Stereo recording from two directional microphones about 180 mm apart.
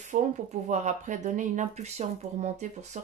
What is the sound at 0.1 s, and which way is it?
Speech, 40° right (ahead or behind).